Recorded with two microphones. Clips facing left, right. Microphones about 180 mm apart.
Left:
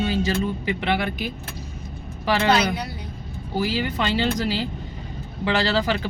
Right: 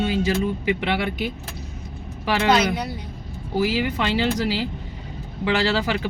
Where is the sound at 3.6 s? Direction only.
10° right (ahead or behind).